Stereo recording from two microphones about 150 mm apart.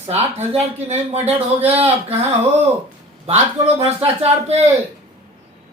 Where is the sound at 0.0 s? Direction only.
45° right (ahead or behind).